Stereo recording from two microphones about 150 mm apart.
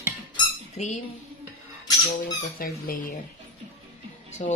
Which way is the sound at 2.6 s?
70° left (ahead or behind).